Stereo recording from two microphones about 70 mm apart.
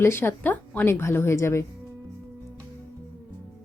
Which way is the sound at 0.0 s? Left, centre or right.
Left.